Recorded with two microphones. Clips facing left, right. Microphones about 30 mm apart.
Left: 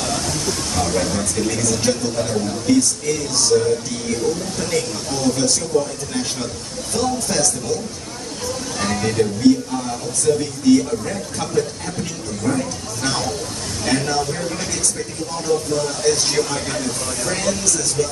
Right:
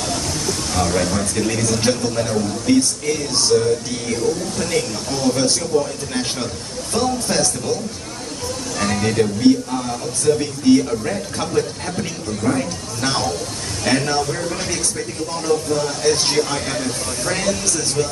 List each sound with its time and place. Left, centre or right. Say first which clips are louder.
0.0 s a sound: left 1 dB; centre
0.9 s speech: right 1 dB; centre
4.6 s speech: right 1 dB; centre
6.9 s speech: right 1 dB; right
8.7 s speech: right 1 dB; centre
10.7 s speech: right 1 dB; right